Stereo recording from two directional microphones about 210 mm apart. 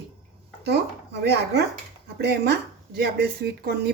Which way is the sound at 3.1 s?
50° right (ahead or behind).